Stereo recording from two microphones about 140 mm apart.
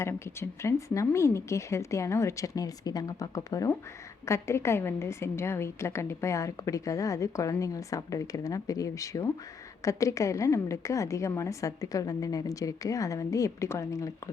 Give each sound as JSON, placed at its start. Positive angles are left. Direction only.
{"t": 0.0, "sound": "a woman's voice", "side_deg": 20}